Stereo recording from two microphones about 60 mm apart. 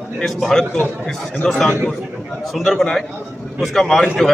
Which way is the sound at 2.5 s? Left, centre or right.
Centre.